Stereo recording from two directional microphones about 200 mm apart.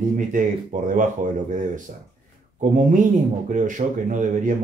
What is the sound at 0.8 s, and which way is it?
Speech, 40° right (ahead or behind).